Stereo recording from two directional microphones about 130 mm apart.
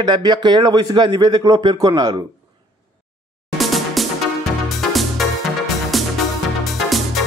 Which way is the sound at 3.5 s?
Centre (ahead or behind).